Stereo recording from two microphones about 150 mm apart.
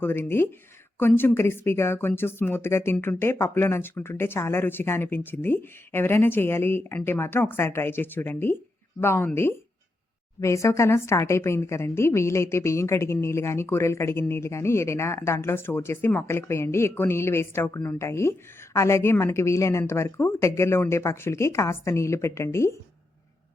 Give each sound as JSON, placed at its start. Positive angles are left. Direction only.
{"t": 0.0, "sound": "speech", "side_deg": 15}